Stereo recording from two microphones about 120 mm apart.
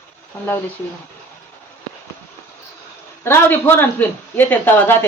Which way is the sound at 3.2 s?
20° left (ahead or behind).